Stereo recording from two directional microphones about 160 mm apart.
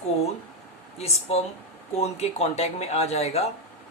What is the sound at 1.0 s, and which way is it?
A woman's voice, 40° left (ahead or behind).